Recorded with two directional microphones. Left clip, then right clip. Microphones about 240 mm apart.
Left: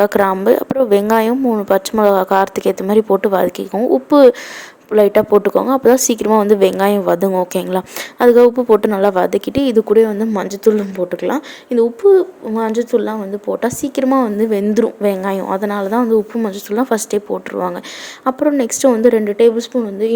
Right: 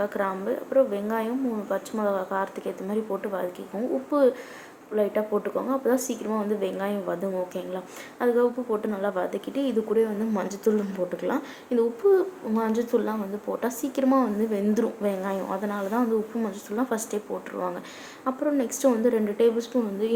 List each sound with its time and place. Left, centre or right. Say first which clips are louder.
0.0 s a woman's voice: left 15 dB; left